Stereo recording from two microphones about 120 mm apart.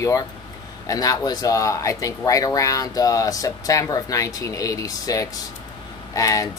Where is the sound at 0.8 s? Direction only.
30° left (ahead or behind).